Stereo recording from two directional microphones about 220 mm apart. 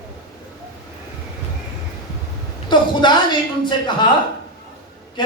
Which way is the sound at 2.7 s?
20° left (ahead or behind).